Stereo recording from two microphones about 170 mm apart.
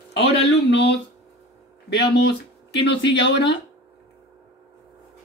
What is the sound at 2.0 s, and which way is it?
Speech, 80° left.